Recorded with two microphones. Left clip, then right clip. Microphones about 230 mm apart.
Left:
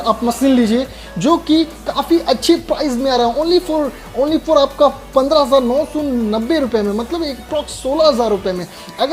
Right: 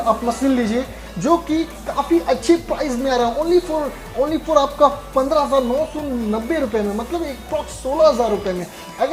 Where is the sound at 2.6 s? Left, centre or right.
Left.